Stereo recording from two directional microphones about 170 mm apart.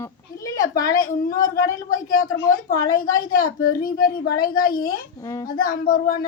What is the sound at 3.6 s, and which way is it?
A woman's voice, 60° left (ahead or behind).